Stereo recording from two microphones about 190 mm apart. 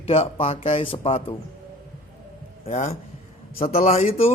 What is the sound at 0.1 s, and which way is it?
A man's voice, 30° left (ahead or behind).